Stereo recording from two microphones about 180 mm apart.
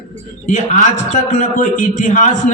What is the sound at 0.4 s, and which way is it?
A man's voice, 40° left (ahead or behind).